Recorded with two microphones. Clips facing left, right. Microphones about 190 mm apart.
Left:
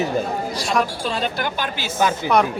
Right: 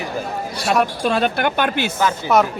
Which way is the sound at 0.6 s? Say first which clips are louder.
Right 6 dB; 65° right (ahead or behind).